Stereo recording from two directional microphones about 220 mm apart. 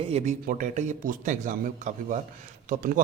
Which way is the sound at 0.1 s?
30° right (ahead or behind).